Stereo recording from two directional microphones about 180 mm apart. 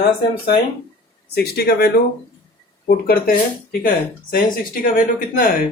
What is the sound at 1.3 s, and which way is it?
Speech, 60° left (ahead or behind).